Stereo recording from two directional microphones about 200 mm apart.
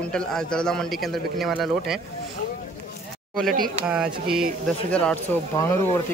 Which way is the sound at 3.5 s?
45° right (ahead or behind).